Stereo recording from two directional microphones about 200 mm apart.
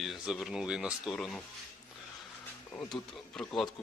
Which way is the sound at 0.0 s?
Centre (ahead or behind).